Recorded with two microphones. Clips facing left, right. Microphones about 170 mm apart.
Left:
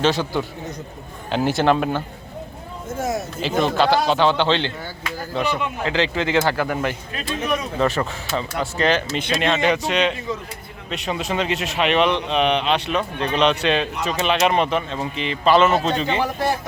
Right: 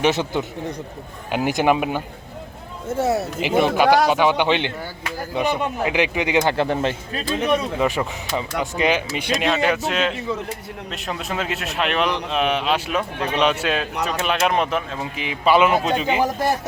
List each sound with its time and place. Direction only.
0.0 s a man's voice: 20° right (ahead or behind)
3.0 s speech: 35° right (ahead or behind)
3.4 s speech: 15° right (ahead or behind); by 7.3 s 30° right (ahead or behind)
7.8 s a man's voice: 10° right (ahead or behind)